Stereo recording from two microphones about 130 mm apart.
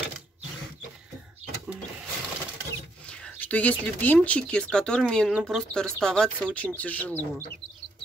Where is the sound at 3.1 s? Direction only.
10° left (ahead or behind).